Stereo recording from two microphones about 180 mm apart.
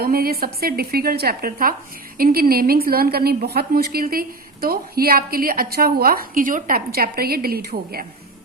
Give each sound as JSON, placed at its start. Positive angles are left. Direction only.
{"t": 0.0, "sound": "a woman's voice", "side_deg": -55}